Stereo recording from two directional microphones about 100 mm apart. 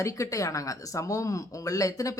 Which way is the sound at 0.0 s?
30° left (ahead or behind).